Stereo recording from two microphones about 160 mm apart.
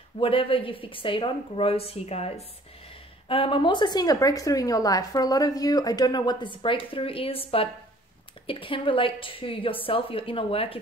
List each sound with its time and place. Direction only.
0.2 s a woman's voice: 35° left (ahead or behind)